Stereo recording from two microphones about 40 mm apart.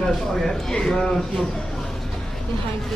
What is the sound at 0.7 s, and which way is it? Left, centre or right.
Speech, centre.